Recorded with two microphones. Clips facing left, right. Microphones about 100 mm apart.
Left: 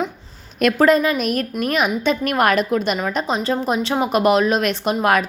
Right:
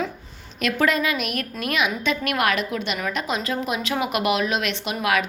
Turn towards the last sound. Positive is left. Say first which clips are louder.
# left 6 dB
turn(degrees=40)  # may be behind; listen again after turning